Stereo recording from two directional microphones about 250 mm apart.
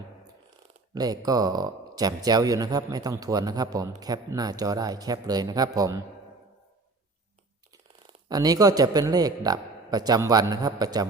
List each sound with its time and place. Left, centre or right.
0.9 s speech: centre
8.3 s speech: centre